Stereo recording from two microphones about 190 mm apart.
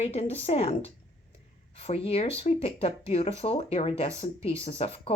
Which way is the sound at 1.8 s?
30° left (ahead or behind).